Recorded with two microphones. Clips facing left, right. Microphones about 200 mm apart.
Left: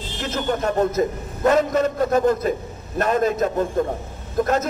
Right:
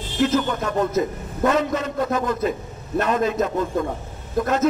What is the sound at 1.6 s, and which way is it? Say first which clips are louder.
A man's voice: left 4 dB; 45° left (ahead or behind).